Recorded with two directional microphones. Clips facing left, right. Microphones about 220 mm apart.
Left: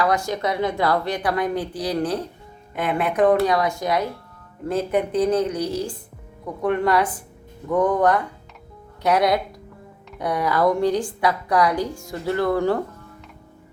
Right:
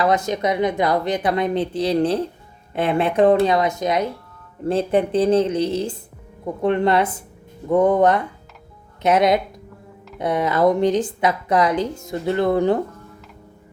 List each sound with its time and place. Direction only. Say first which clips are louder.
0.0 s a woman's voice: right 3 dB; 20° right (ahead or behind)